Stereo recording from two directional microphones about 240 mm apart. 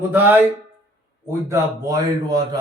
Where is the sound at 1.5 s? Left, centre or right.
Centre.